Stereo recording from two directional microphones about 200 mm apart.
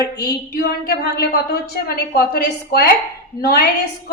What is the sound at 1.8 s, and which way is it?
A woman's voice, 50° left (ahead or behind).